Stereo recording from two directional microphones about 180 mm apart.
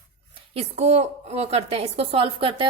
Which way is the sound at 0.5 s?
35° right (ahead or behind).